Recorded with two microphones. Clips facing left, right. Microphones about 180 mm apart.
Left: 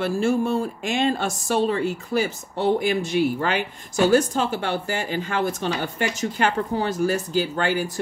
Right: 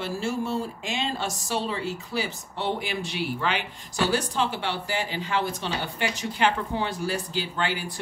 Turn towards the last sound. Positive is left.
turn(degrees=45)  # may be behind; listen again after turning